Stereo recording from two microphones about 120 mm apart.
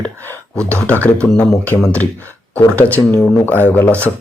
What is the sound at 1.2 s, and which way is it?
Speech, 10° left (ahead or behind).